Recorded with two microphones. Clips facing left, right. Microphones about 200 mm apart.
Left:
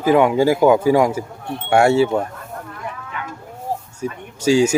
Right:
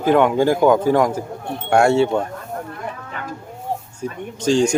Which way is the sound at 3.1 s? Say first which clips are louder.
Even; 40° right (ahead or behind).